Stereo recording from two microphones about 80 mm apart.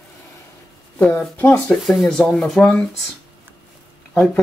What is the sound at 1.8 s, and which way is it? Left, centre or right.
Speech, centre.